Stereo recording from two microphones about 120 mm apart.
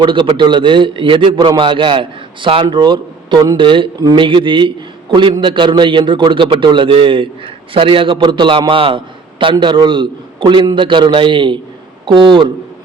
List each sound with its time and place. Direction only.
0.0 s a man's voice: 45° right (ahead or behind)